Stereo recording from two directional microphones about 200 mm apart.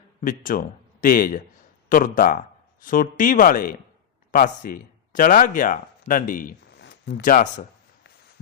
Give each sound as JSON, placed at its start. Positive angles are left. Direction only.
{"t": 0.2, "sound": "speech", "side_deg": 45}
{"t": 7.1, "sound": "speech", "side_deg": 40}